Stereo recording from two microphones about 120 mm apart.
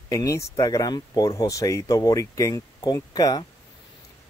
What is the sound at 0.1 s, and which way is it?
Speech, 25° left (ahead or behind).